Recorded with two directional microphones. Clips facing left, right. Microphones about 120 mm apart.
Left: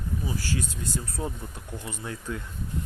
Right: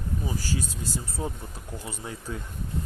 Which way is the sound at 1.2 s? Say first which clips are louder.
Even; 20° right (ahead or behind).